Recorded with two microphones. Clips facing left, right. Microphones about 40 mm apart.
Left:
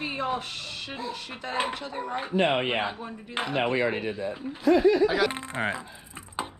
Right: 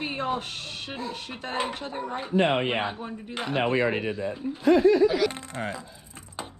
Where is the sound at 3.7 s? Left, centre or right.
Right.